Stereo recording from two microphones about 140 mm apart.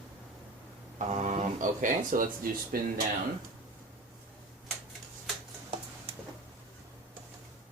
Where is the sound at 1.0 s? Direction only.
60° right (ahead or behind); by 2.8 s 85° right.